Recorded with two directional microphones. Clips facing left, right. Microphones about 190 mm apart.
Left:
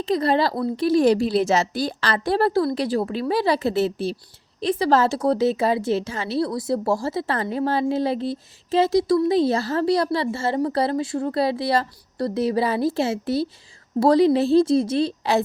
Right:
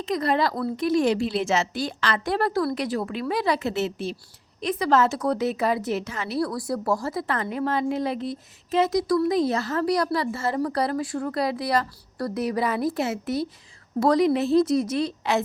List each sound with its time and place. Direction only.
0.0 s a woman's voice: 30° left (ahead or behind)